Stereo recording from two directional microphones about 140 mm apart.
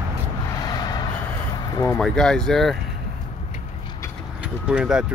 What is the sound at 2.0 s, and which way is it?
Speech, 5° left (ahead or behind).